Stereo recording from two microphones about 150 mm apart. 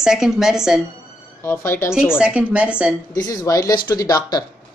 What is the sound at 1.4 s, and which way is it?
Speech, 15° left (ahead or behind).